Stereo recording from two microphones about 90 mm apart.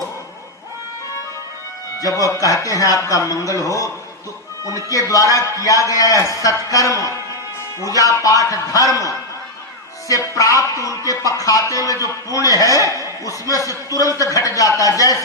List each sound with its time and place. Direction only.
2.0 s a man's voice: 40° left (ahead or behind)
10.1 s a man's voice: 40° left (ahead or behind)